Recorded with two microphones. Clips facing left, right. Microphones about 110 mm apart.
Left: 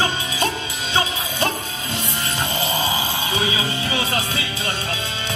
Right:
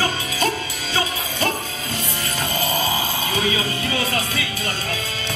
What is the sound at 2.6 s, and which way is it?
Music, 20° left (ahead or behind).